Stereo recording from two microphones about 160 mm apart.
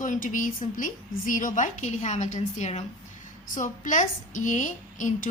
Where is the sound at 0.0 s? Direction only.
55° left (ahead or behind).